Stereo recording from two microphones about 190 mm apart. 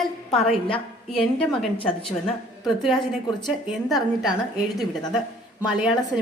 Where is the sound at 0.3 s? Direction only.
Centre (ahead or behind).